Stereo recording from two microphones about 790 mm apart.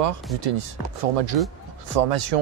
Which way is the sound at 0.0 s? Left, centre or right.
Right.